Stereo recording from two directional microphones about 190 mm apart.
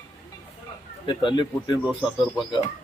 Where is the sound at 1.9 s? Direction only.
Centre (ahead or behind).